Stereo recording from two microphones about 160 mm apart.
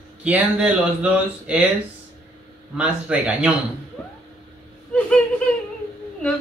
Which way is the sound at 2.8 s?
5° right (ahead or behind).